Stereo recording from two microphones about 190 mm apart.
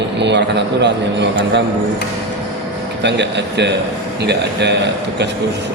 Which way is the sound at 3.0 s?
65° right (ahead or behind).